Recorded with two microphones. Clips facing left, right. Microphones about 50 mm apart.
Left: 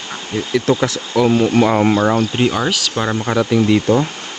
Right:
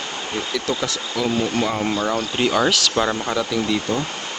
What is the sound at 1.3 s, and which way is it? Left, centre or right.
Speech, left.